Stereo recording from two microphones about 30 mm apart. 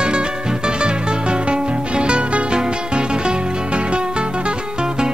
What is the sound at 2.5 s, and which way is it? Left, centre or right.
Music, right.